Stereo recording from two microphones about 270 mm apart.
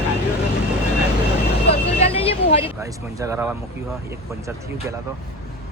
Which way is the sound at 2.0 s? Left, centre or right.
Left.